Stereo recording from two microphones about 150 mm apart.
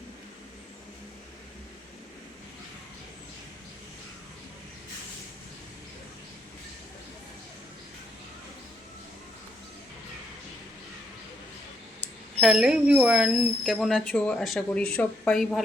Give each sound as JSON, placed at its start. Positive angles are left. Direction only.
{"t": 12.4, "sound": "speech", "side_deg": -5}